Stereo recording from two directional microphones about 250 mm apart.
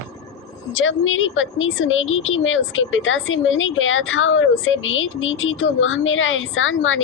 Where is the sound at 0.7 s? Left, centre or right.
Left.